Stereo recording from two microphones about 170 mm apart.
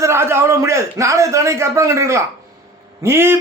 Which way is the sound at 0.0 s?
15° right (ahead or behind).